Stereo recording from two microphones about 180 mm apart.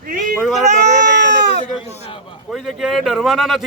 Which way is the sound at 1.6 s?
35° left (ahead or behind).